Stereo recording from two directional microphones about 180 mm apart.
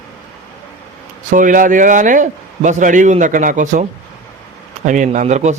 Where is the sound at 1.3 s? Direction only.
50° right (ahead or behind).